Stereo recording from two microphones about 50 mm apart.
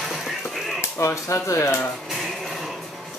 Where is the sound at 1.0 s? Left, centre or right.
Left.